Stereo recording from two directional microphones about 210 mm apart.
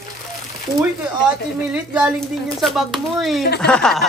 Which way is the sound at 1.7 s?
5° right (ahead or behind).